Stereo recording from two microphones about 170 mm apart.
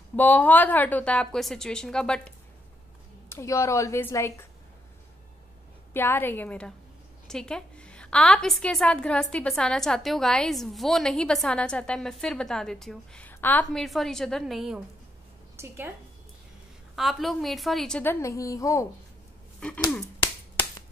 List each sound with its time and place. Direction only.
0.1 s a woman's voice: 10° left (ahead or behind)
3.3 s speech: 15° left (ahead or behind)
5.9 s a woman's voice: 10° left (ahead or behind)
15.5 s a woman's voice: 15° right (ahead or behind)
16.9 s a woman's voice: centre (ahead or behind)
18.2 s a woman's voice: 20° left (ahead or behind)
19.6 s a woman's voice: 5° left (ahead or behind)